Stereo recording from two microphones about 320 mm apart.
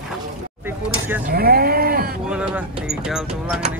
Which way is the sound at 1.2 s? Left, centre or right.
Right.